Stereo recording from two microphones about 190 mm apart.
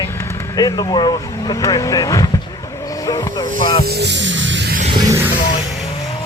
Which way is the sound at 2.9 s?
15° left (ahead or behind).